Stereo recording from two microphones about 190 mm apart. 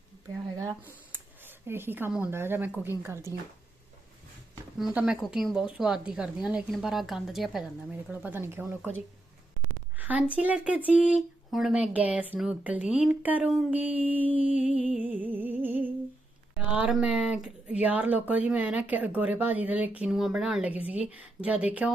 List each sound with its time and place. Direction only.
0.5 s speech: 15° right (ahead or behind)
4.8 s a woman's voice: 5° right (ahead or behind)
10.0 s a woman's voice: 10° right (ahead or behind)
14.8 s music: 5° right (ahead or behind)
16.6 s speech: 5° right (ahead or behind)